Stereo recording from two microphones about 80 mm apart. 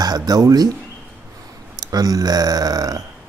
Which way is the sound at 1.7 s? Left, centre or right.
Right.